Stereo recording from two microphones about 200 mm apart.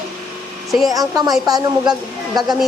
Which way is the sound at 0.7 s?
Centre (ahead or behind).